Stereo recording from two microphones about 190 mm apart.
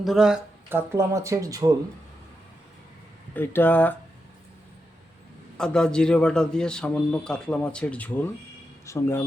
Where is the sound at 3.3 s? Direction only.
10° left (ahead or behind).